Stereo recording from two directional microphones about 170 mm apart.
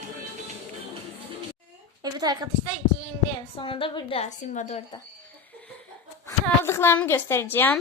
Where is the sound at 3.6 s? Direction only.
30° left (ahead or behind).